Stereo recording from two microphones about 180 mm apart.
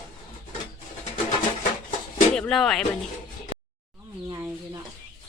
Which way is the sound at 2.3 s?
Centre (ahead or behind).